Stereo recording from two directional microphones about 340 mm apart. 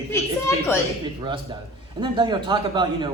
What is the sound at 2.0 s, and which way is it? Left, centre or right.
Speech, centre.